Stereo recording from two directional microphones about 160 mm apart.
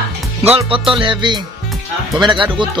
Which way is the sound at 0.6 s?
35° right (ahead or behind).